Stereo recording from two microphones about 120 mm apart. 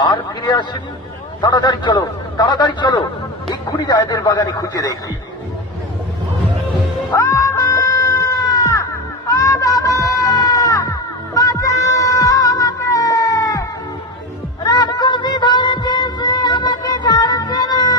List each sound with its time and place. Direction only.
0.0 s a man's voice: 40° left (ahead or behind)
7.1 s screaming: 30° left (ahead or behind)
14.6 s music: 35° left (ahead or behind)